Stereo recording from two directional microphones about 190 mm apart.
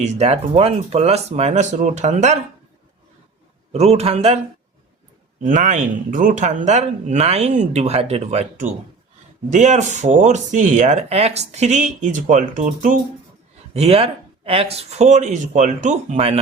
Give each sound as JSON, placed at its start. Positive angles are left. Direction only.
{"t": 0.0, "sound": "speech", "side_deg": -35}
{"t": 3.7, "sound": "speech", "side_deg": -35}
{"t": 5.4, "sound": "speech", "side_deg": -40}